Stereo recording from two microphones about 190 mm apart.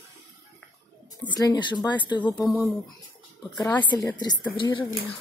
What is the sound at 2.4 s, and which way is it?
Speech, centre (ahead or behind).